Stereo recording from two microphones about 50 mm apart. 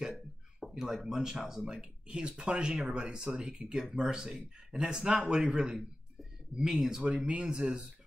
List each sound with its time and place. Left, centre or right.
0.6 s a sound: centre
1.1 s speech: centre
3.3 s a man's voice: centre